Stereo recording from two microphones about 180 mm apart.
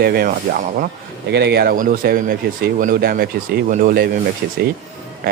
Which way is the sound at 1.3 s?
65° right (ahead or behind).